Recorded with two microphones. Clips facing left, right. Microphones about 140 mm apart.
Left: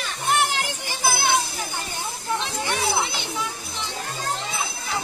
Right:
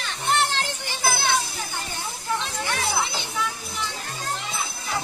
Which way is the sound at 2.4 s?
20° left (ahead or behind).